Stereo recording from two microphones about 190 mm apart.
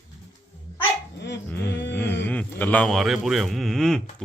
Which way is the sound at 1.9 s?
10° left (ahead or behind).